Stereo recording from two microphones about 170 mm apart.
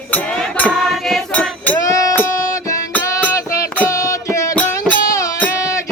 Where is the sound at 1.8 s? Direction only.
20° left (ahead or behind).